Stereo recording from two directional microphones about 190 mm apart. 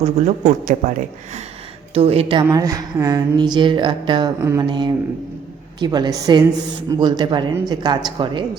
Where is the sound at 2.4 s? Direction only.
20° right (ahead or behind).